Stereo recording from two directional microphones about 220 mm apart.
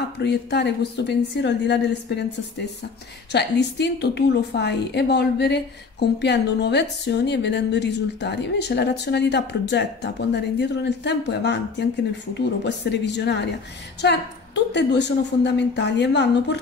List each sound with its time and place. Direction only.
0.2 s a woman's voice: 50° left (ahead or behind)